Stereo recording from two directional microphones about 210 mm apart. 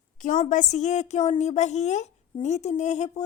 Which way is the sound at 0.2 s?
35° left (ahead or behind).